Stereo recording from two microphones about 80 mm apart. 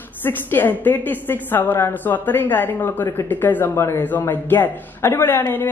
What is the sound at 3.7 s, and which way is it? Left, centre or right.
A man's voice, left.